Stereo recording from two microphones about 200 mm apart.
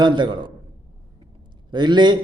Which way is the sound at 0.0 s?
20° right (ahead or behind).